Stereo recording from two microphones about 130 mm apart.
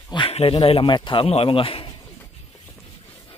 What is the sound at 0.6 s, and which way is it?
Speech, 45° left (ahead or behind).